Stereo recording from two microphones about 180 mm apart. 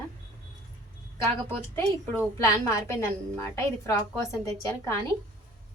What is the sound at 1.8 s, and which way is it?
A woman's voice, 15° left (ahead or behind).